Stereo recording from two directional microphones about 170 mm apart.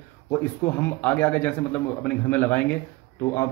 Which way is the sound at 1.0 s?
10° left (ahead or behind).